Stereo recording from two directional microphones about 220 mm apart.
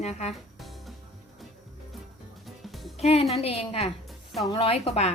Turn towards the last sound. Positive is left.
turn(degrees=25)  # may be behind; listen again after turning